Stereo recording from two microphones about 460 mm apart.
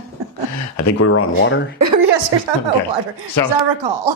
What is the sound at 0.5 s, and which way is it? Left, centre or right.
Speech, left.